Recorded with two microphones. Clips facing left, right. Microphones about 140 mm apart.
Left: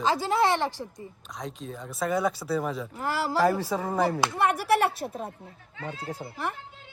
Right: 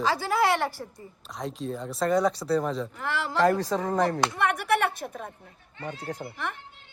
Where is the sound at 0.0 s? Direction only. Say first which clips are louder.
Left 1 dB; 25° left (ahead or behind).